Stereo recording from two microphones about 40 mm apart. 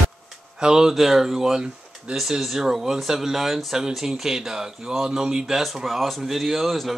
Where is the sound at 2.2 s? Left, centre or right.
Centre.